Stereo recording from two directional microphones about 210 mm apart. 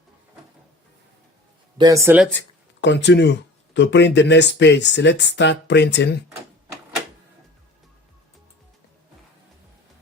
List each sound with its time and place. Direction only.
1.8 s speech: 15° right (ahead or behind)
2.8 s speech: 55° left (ahead or behind)